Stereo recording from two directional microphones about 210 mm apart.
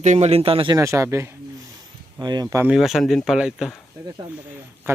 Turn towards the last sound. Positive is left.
turn(degrees=-10)  # may be behind; listen again after turning